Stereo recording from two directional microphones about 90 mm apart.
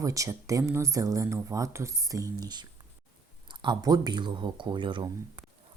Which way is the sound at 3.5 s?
60° right (ahead or behind).